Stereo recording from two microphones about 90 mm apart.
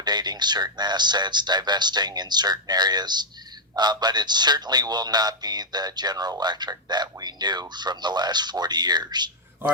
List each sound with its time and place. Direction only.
0.0 s speech: 50° right (ahead or behind)